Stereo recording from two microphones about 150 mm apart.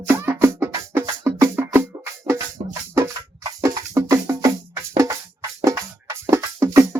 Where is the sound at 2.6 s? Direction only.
40° right (ahead or behind).